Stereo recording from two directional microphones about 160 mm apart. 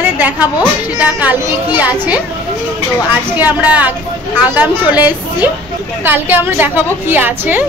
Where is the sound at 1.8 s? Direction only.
10° right (ahead or behind).